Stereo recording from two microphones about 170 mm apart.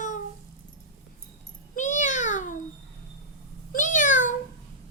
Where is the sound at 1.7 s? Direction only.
45° left (ahead or behind).